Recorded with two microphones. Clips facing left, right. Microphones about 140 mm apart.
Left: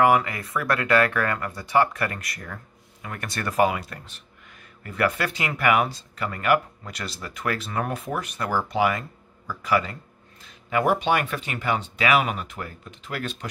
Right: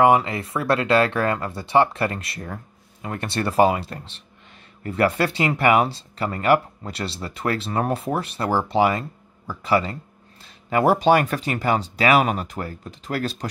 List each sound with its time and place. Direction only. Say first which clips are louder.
0.0 s speech: right 3 dB; 25° right (ahead or behind)